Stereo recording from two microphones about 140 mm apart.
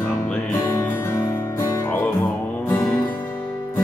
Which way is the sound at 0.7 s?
20° left (ahead or behind).